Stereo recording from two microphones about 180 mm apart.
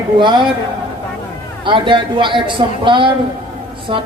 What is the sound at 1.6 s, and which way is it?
A woman's voice, 25° right (ahead or behind).